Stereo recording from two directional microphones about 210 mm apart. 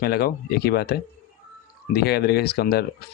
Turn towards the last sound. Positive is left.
turn(degrees=50)  # may be behind; listen again after turning